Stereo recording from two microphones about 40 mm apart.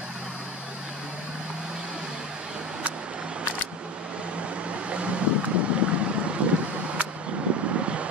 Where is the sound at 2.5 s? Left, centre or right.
Right.